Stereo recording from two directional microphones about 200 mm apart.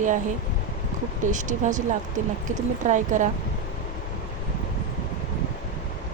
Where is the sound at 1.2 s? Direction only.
40° right (ahead or behind).